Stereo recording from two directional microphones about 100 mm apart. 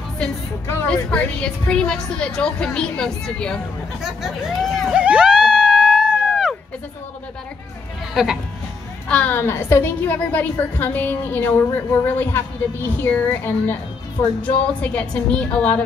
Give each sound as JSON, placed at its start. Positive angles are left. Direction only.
{"t": 0.8, "sound": "a woman's voice", "side_deg": 10}
{"t": 4.0, "sound": "speech", "side_deg": -5}
{"t": 4.9, "sound": "screaming", "side_deg": -10}
{"t": 8.1, "sound": "speech", "side_deg": -5}
{"t": 9.1, "sound": "a woman's voice", "side_deg": 15}